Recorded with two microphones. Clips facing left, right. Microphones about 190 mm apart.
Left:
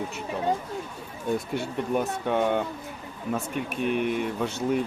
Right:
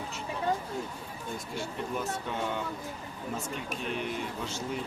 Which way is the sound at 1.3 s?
60° left (ahead or behind).